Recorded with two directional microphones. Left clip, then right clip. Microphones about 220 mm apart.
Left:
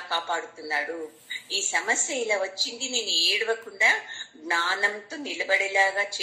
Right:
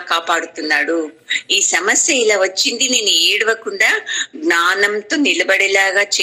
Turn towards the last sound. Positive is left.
turn(degrees=-45)  # may be behind; listen again after turning